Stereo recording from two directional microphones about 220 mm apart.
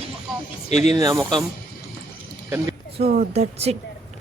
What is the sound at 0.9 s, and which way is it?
Speech, 15° right (ahead or behind).